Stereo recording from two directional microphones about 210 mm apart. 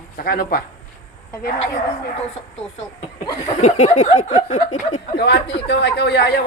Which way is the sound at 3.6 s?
30° left (ahead or behind).